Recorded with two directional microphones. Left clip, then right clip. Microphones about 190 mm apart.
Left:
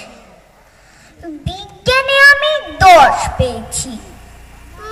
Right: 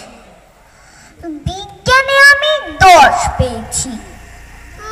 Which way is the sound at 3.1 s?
35° left (ahead or behind).